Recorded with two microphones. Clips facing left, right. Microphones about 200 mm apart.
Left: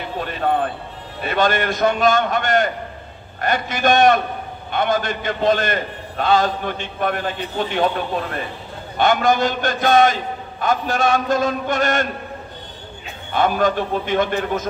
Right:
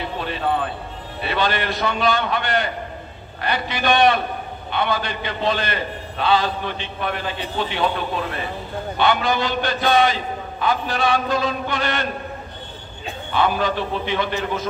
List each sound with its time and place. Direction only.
0.2 s a sound: 50° left (ahead or behind)
1.2 s a man's voice: 45° left (ahead or behind)
8.9 s a man's voice: 45° left (ahead or behind)
13.3 s a man's voice: 45° left (ahead or behind)